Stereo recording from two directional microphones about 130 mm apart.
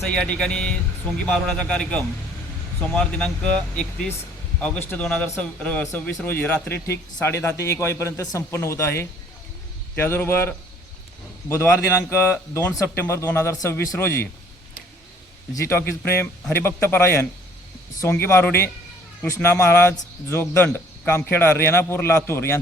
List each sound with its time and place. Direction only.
0.1 s a man's voice: 5° left (ahead or behind)
15.5 s a man's voice: 20° left (ahead or behind)